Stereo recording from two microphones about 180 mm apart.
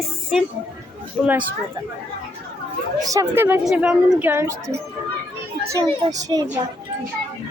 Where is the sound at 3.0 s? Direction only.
20° right (ahead or behind).